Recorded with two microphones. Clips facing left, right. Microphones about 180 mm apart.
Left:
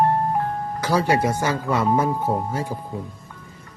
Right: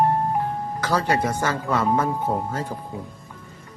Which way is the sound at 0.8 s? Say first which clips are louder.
Left 2 dB; 10° left (ahead or behind).